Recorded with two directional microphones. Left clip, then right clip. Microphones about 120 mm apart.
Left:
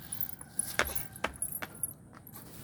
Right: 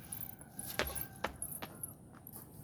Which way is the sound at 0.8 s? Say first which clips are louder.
Left 6 dB; 90° left.